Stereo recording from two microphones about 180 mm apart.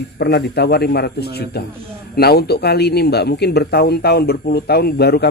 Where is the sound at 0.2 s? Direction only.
65° left (ahead or behind).